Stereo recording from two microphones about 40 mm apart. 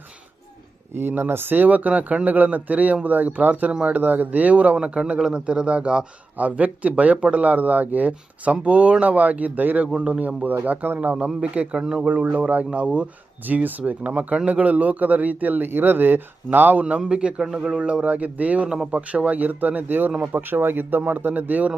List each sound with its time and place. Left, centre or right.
0.9 s speech: right
6.3 s speech: right
11.3 s speech: right
13.5 s speech: right
14.1 s speech: right
17.0 s speech: right
17.7 s speech: right
20.3 s speech: right
21.2 s speech: right